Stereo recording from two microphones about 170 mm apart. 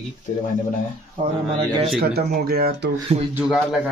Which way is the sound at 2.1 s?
65° right (ahead or behind).